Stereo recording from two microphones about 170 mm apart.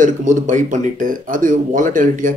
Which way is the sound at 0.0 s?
50° right (ahead or behind).